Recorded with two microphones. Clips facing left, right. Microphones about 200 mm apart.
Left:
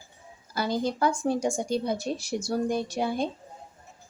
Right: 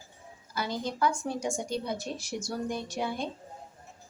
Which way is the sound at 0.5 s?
35° left (ahead or behind).